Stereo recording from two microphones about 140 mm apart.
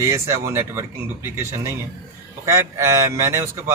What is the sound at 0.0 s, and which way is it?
Speech, 20° right (ahead or behind).